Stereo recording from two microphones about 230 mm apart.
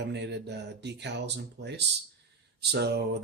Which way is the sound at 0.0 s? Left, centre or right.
Right.